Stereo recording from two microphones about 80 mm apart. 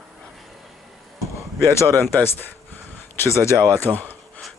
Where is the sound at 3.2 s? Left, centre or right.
Left.